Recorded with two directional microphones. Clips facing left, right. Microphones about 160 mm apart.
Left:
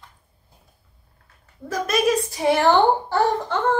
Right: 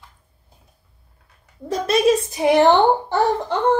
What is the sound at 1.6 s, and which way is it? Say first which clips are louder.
A woman's voice: right 4 dB; 25° right (ahead or behind).